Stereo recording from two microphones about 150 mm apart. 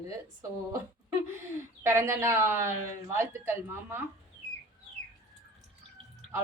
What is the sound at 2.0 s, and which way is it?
Speech, 15° right (ahead or behind).